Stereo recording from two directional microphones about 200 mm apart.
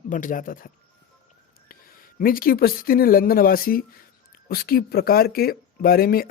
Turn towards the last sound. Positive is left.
turn(degrees=50)  # may be behind; listen again after turning